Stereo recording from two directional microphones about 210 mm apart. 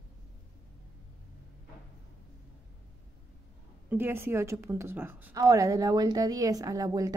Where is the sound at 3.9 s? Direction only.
10° right (ahead or behind).